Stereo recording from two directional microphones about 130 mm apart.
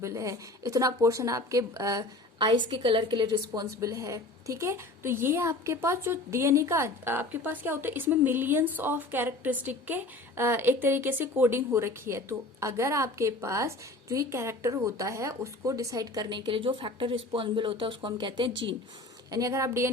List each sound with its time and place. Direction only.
0.0 s a woman's voice: 25° right (ahead or behind)
19.3 s a woman's voice: 25° right (ahead or behind)